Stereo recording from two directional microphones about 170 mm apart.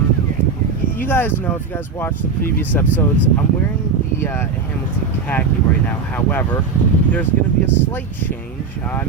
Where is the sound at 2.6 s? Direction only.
10° left (ahead or behind).